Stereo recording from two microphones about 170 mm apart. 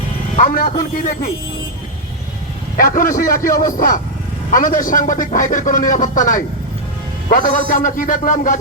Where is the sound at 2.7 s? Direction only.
50° left (ahead or behind).